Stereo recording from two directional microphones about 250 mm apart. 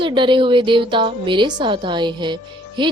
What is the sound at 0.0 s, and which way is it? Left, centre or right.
A woman's voice, centre.